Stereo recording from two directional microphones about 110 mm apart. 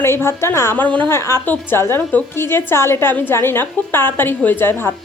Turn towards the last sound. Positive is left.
turn(degrees=20)  # may be behind; listen again after turning